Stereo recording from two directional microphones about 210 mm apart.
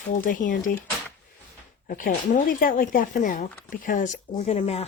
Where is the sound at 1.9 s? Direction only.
40° left (ahead or behind).